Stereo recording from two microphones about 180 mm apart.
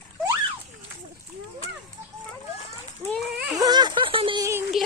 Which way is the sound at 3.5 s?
20° right (ahead or behind).